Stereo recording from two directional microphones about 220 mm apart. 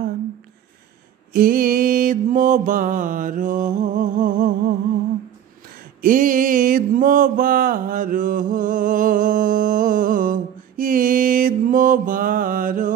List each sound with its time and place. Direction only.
1.3 s mantra: 40° right (ahead or behind)
6.0 s mantra: 35° right (ahead or behind)